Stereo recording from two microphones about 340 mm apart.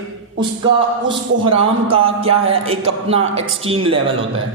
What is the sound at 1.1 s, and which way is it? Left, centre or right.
Speech, centre.